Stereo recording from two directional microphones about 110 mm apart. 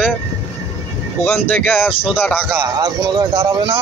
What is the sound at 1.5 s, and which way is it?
Speech, 15° left (ahead or behind).